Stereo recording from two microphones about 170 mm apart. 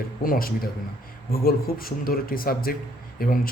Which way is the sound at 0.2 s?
60° left (ahead or behind).